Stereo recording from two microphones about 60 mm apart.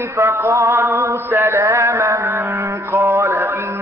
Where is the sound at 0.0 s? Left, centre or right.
Right.